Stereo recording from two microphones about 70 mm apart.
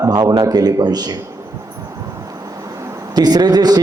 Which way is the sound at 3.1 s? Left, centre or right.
Right.